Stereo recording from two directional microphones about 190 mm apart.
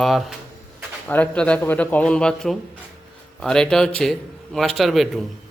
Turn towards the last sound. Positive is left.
turn(degrees=0)  # may be behind; listen again after turning